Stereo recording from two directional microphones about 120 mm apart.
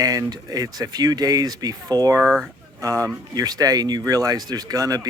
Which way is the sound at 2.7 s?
25° right (ahead or behind).